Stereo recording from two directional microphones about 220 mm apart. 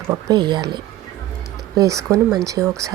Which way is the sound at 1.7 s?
15° right (ahead or behind).